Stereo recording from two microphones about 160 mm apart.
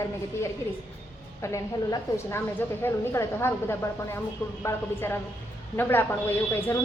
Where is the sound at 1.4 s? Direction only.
20° left (ahead or behind).